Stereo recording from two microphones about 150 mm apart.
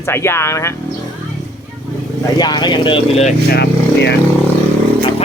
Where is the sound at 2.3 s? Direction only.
30° left (ahead or behind); by 3.3 s 45° left (ahead or behind).